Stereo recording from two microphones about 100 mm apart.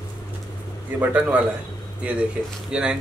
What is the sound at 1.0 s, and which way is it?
Speech, 15° right (ahead or behind).